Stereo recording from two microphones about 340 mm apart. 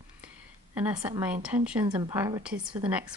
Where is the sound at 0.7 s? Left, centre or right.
Centre.